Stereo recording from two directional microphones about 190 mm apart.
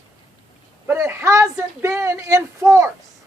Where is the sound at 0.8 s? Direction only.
15° right (ahead or behind).